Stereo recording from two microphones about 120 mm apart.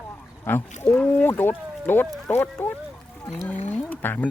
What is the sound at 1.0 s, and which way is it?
Speech, 15° left (ahead or behind).